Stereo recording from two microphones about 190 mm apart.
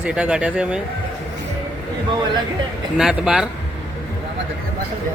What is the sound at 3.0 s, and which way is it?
Speech, centre (ahead or behind).